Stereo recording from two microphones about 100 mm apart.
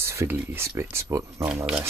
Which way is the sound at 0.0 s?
25° right (ahead or behind).